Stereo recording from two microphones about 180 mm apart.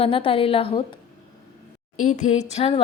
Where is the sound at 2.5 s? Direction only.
35° left (ahead or behind).